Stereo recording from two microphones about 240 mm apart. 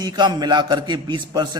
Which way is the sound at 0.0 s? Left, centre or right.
Centre.